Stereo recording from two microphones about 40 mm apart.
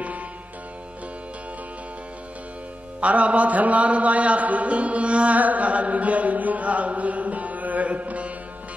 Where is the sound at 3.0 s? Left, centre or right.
Right.